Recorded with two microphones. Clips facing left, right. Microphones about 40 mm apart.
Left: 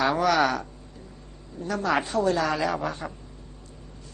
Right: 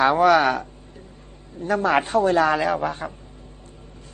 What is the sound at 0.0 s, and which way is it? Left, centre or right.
A man's voice, right.